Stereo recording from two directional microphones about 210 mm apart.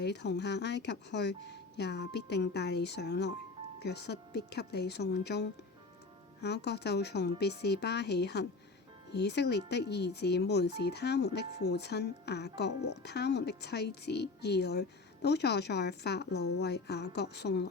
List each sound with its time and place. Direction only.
0.0 s speech: 55° left (ahead or behind)